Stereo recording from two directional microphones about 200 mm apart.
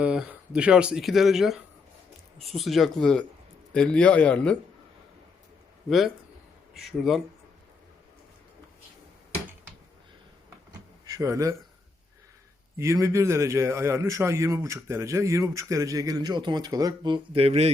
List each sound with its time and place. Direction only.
0.0 s speech: 5° right (ahead or behind)
6.7 s speech: centre (ahead or behind)
11.0 s speech: 15° right (ahead or behind)
12.7 s a man's voice: 15° right (ahead or behind); by 17.7 s 30° right (ahead or behind)